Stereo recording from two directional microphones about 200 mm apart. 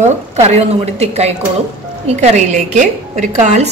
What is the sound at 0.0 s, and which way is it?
A woman's voice, 35° right (ahead or behind).